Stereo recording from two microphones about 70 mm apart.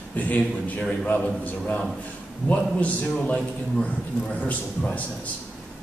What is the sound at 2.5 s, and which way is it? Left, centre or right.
A man's voice, centre.